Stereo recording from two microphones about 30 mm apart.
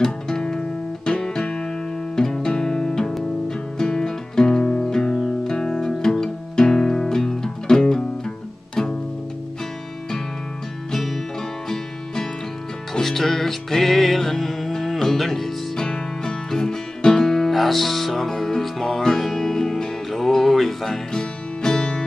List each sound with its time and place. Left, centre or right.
0.3 s music: left
2.1 s music: centre
10.9 s music: centre
13.0 s music: centre
15.7 s music: left
17.5 s music: centre
21.1 s music: left